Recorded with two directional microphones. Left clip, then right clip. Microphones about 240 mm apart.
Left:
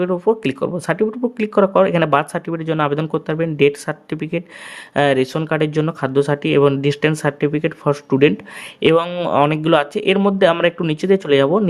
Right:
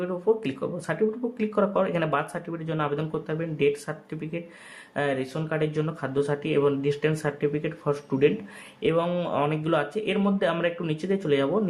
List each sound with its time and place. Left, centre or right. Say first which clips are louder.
0.0 s speech: left 8 dB; left